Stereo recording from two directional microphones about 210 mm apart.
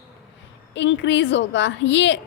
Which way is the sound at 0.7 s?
60° left (ahead or behind).